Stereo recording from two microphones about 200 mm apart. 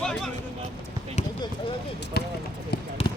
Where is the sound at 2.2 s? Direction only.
55° left (ahead or behind).